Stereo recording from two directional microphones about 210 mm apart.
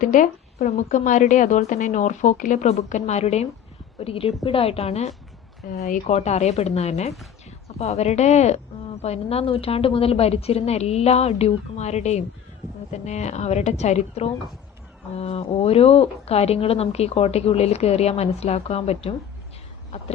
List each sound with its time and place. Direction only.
0.0 s a woman's voice: 35° left (ahead or behind)